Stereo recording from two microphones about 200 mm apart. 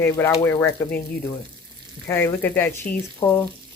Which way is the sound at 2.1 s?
10° left (ahead or behind).